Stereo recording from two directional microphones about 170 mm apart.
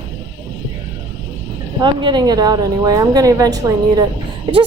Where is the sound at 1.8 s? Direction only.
25° right (ahead or behind).